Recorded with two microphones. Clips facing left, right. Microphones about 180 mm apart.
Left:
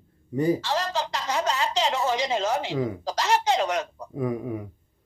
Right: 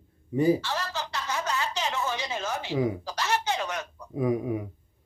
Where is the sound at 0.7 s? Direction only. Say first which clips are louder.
Left 5 dB; 90° left.